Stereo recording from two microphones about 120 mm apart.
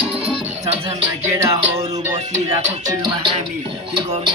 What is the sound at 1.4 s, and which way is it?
Music, 25° right (ahead or behind).